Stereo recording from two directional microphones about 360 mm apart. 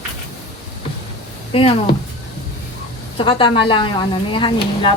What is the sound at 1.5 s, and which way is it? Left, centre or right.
Speech, centre.